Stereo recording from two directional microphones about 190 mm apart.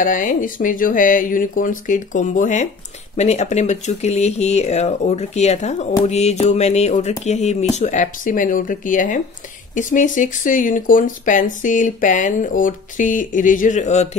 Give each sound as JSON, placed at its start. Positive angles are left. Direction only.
{"t": 0.0, "sound": "speech", "side_deg": 45}